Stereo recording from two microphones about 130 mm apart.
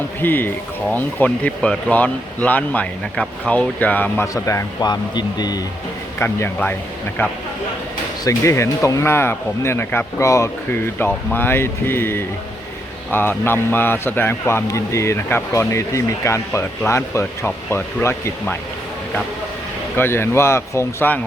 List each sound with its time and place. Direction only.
0.2 s a man's voice: 15° left (ahead or behind); by 5.5 s 30° left (ahead or behind)
6.1 s a man's voice: 15° left (ahead or behind)
20.0 s speech: 20° left (ahead or behind)